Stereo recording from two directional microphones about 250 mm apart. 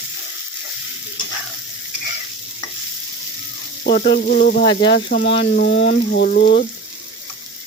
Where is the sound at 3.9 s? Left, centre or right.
Left.